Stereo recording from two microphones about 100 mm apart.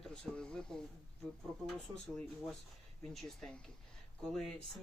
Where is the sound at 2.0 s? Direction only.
5° left (ahead or behind).